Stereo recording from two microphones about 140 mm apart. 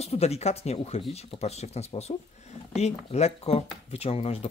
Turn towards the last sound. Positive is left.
turn(degrees=45)  # may be behind; listen again after turning